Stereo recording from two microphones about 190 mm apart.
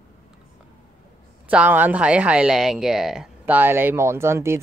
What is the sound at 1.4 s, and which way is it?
Speech, 10° right (ahead or behind).